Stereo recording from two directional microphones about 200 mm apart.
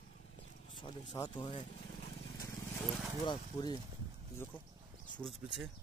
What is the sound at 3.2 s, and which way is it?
Speech, 20° left (ahead or behind).